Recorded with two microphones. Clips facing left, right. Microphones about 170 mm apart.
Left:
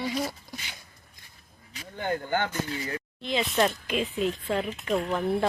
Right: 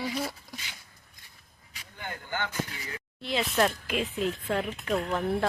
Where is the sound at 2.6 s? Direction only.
30° left (ahead or behind).